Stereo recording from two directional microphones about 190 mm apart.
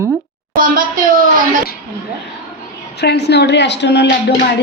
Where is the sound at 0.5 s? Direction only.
45° right (ahead or behind).